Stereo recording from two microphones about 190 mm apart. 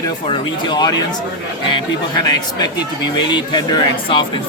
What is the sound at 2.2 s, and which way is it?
A man's voice, 20° left (ahead or behind).